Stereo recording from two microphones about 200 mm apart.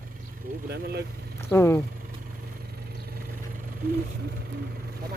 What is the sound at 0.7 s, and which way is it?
Speech, 55° right (ahead or behind).